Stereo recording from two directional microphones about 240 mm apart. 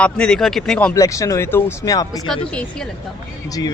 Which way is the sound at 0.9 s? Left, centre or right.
Centre.